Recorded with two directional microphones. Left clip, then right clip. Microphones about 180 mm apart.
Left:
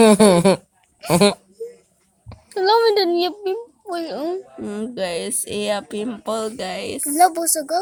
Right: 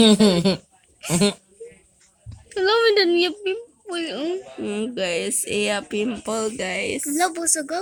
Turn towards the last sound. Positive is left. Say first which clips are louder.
# left 6 dB
turn(degrees=50)  # may be behind; listen again after turning